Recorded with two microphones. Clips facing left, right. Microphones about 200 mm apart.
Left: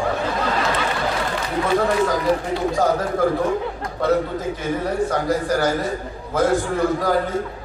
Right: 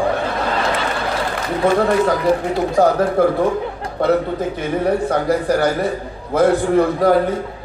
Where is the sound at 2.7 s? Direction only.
60° right (ahead or behind).